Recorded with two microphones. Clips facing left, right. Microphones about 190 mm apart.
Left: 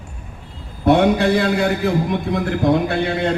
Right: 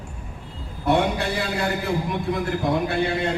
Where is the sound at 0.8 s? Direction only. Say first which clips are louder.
Left 7 dB; 90° left.